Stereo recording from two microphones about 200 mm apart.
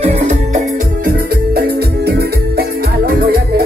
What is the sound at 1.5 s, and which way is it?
Music, 50° right (ahead or behind).